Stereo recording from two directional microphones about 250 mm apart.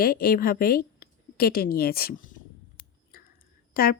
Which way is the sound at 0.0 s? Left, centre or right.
Left.